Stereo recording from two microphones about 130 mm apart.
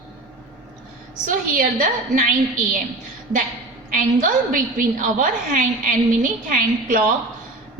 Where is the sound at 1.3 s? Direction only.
90° right.